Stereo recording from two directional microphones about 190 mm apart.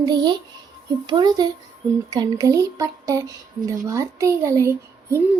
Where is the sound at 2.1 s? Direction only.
20° right (ahead or behind).